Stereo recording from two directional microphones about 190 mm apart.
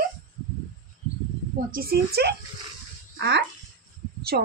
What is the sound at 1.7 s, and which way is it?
Speech, 55° right (ahead or behind).